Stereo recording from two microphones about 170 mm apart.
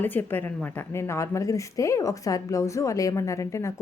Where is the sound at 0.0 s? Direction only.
10° left (ahead or behind).